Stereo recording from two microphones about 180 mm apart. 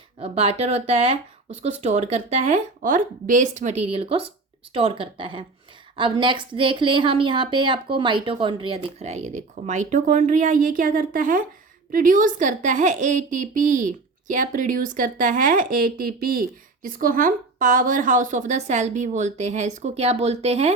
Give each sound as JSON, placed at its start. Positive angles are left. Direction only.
{"t": 0.2, "sound": "a woman's voice", "side_deg": -35}